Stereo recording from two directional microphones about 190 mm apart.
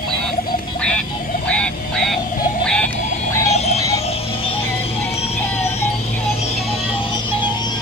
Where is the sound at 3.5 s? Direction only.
35° left (ahead or behind).